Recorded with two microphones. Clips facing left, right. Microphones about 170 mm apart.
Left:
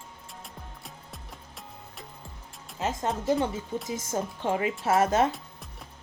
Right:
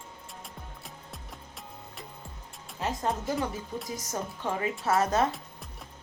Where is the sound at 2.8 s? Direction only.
25° left (ahead or behind).